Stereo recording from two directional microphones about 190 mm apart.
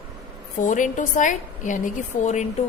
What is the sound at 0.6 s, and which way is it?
A woman's voice, 40° left (ahead or behind).